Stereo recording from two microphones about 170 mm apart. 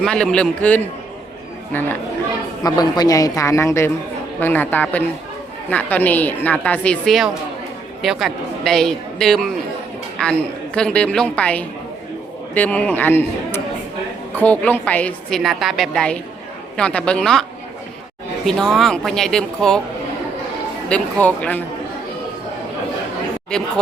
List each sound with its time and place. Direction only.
0.0 s a woman's voice: 5° left (ahead or behind)
2.6 s a woman's voice: 25° left (ahead or behind); by 17.4 s 5° left (ahead or behind)
18.4 s a woman's voice: centre (ahead or behind)
20.9 s a woman's voice: 10° left (ahead or behind)